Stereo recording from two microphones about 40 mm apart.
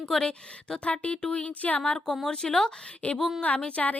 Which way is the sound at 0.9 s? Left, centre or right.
Left.